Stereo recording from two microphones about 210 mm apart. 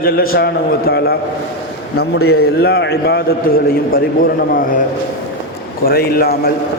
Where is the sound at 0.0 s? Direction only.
45° left (ahead or behind).